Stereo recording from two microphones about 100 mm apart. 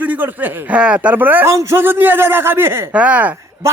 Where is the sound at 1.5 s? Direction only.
30° right (ahead or behind).